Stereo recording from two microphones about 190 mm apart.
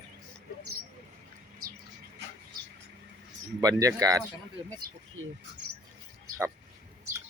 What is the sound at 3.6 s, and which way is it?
Speech, 20° right (ahead or behind).